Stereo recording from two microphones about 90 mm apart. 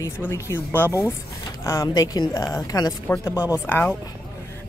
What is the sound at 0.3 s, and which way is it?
Speech, 30° left (ahead or behind).